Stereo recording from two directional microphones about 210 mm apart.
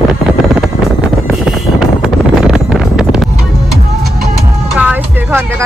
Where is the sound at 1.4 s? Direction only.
Centre (ahead or behind).